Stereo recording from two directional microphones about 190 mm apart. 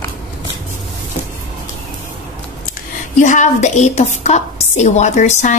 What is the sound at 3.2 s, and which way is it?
A woman's voice, 40° left (ahead or behind).